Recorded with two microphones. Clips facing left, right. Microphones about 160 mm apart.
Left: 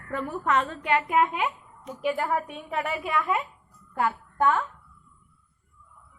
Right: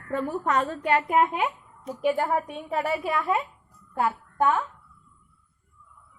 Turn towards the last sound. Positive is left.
turn(degrees=-20)  # may be behind; listen again after turning